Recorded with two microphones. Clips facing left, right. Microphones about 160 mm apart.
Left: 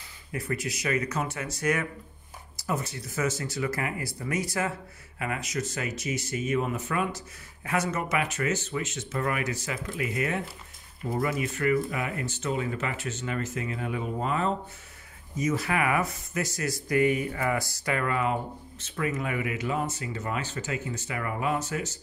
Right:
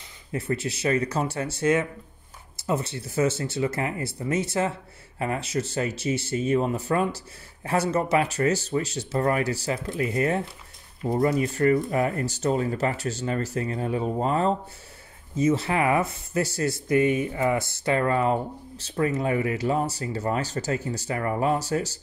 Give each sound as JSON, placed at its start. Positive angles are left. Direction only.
{"t": 0.3, "sound": "speech", "side_deg": -30}